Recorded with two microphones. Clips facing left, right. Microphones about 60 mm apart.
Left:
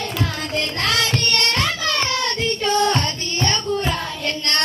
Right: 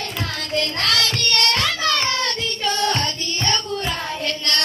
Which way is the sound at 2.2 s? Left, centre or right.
Left.